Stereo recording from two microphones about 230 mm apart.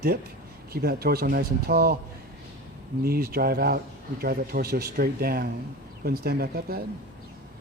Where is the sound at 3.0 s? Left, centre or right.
Right.